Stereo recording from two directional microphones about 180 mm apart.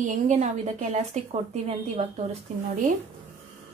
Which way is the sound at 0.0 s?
40° right (ahead or behind).